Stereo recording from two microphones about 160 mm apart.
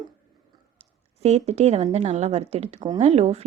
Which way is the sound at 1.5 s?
40° right (ahead or behind).